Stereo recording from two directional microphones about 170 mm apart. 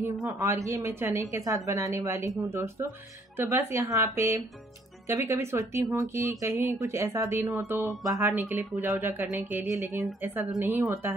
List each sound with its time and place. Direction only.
0.0 s a woman's voice: 15° right (ahead or behind)